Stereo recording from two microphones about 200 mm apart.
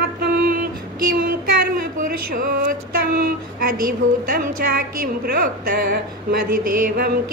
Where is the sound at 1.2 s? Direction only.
45° right (ahead or behind).